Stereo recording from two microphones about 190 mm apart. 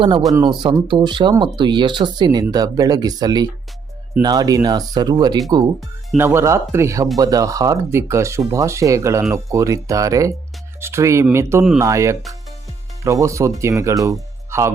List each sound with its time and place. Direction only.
0.3 s speech: 20° right (ahead or behind)